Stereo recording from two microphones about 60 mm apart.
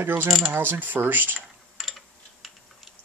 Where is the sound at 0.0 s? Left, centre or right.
Right.